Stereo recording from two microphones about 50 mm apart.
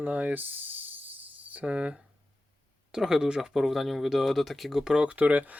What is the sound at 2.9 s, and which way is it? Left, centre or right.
Speech, centre.